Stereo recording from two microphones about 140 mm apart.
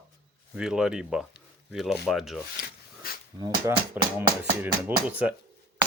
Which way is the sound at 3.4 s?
25° right (ahead or behind).